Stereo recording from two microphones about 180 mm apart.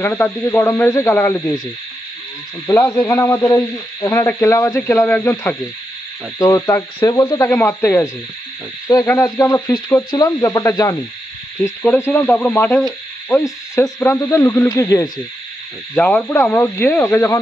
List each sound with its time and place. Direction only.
0.0 s speech: 10° left (ahead or behind)
2.6 s speech: 15° left (ahead or behind)
15.9 s speech: 5° left (ahead or behind)